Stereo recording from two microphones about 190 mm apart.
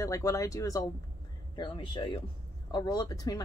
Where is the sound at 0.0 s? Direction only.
15° left (ahead or behind).